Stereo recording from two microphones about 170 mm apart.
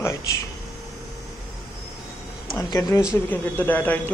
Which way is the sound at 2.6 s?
20° left (ahead or behind).